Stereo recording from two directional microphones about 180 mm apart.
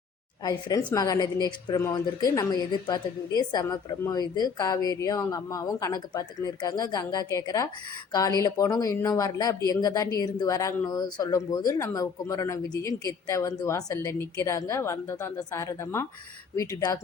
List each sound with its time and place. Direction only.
0.9 s a woman's voice: 20° left (ahead or behind)